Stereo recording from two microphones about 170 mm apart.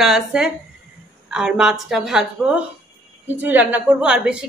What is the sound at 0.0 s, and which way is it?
A woman's voice, 5° right (ahead or behind).